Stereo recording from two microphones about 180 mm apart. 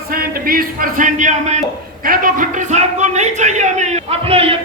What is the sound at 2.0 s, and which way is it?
A man's voice, 50° right (ahead or behind).